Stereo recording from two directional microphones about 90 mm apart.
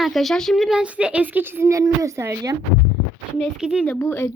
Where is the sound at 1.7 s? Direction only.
40° right (ahead or behind).